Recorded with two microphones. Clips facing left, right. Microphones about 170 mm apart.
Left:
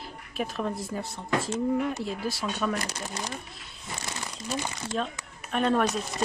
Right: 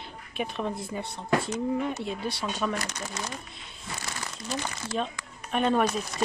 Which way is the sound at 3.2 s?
35° left (ahead or behind).